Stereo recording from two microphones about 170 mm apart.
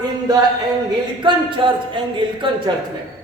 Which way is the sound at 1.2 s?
30° right (ahead or behind).